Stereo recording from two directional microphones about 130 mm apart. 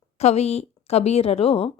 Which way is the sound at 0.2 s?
55° left (ahead or behind).